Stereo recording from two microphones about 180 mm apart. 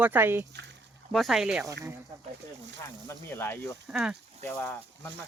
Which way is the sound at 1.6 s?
15° right (ahead or behind).